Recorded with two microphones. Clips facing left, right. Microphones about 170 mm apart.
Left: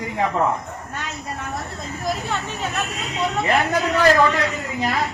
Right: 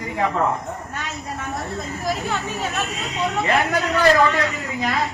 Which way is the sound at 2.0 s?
Centre (ahead or behind).